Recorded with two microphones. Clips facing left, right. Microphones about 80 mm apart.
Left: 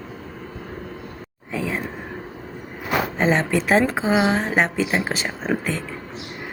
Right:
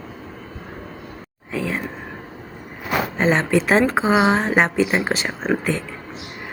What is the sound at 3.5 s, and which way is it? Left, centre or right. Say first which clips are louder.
Speech: right 2 dB; centre.